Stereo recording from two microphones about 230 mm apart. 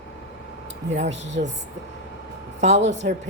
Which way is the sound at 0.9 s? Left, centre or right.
Right.